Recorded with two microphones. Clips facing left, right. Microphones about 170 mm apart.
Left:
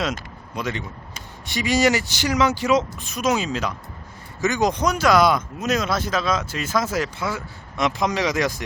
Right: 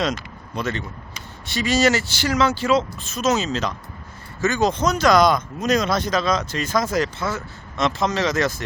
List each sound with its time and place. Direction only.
0.0 s speech: 10° left (ahead or behind)